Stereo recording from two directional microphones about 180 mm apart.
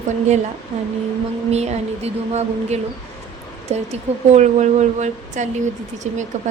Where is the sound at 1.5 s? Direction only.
35° right (ahead or behind).